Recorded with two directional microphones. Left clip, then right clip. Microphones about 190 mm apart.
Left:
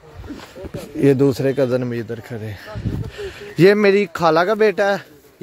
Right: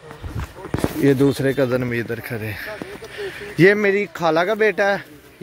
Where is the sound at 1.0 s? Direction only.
30° left (ahead or behind).